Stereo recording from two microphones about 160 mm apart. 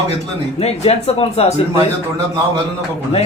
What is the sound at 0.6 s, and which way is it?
Speech, 40° left (ahead or behind).